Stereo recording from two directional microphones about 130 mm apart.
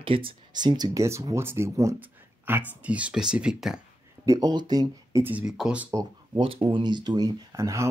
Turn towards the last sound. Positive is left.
turn(degrees=-25)  # may be behind; listen again after turning